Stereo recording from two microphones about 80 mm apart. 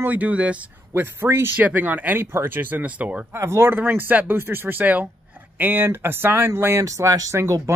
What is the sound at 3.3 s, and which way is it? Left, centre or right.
Speech, right.